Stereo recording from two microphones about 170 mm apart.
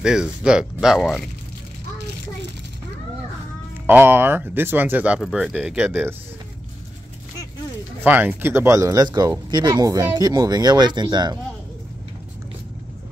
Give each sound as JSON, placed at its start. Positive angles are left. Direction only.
{"t": 0.0, "sound": "speech", "side_deg": -5}
{"t": 3.8, "sound": "speech", "side_deg": -10}
{"t": 8.0, "sound": "speech", "side_deg": -10}